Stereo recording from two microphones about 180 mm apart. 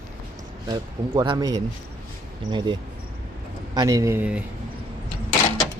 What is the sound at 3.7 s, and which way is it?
Speech, 15° right (ahead or behind).